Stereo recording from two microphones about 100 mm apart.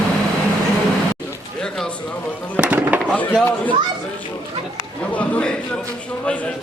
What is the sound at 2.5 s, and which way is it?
Music, 10° right (ahead or behind).